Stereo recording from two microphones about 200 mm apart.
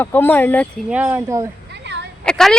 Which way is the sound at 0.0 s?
10° left (ahead or behind).